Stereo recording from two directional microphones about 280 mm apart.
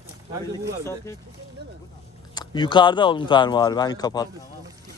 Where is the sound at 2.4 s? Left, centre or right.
Centre.